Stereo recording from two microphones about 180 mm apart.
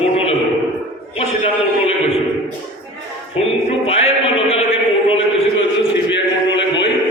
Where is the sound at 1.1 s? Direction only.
35° left (ahead or behind).